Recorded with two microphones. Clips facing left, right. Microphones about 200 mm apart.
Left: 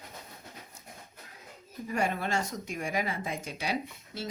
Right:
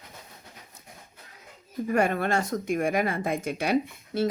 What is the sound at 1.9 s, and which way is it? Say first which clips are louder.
Speech: right 6 dB; 55° right (ahead or behind).